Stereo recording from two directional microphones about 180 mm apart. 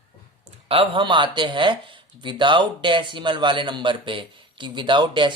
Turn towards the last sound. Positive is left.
turn(degrees=-25)  # may be behind; listen again after turning